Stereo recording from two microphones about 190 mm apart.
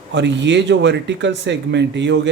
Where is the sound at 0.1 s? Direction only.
70° right (ahead or behind).